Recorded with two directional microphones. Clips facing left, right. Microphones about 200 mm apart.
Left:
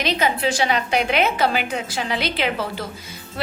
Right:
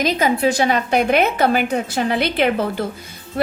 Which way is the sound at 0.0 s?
45° right (ahead or behind).